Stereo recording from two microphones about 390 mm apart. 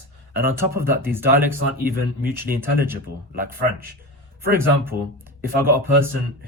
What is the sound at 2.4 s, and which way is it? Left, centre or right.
Speech, right.